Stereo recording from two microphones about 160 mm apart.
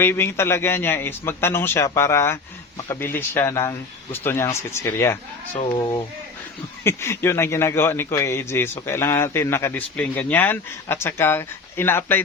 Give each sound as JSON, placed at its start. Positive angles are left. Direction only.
{"t": 0.0, "sound": "a man's voice", "side_deg": 15}
{"t": 6.8, "sound": "a man's voice", "side_deg": 15}